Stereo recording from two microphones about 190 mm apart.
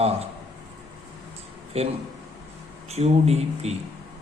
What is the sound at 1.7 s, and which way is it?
A man's voice, 35° right (ahead or behind).